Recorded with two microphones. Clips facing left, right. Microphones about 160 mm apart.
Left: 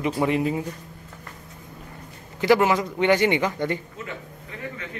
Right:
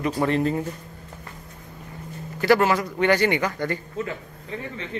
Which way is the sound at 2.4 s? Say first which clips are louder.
Even; 15° left (ahead or behind).